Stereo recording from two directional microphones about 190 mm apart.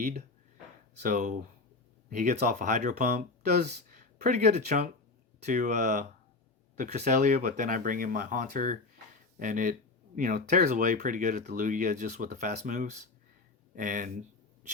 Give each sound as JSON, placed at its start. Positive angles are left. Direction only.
{"t": 1.0, "sound": "speech", "side_deg": -40}